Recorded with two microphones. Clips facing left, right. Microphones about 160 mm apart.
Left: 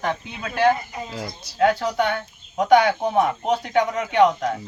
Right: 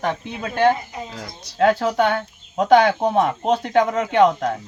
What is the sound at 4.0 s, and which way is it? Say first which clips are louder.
Speech: right 2 dB; 45° right (ahead or behind).